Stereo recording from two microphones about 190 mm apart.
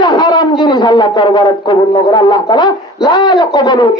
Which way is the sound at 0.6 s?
25° left (ahead or behind).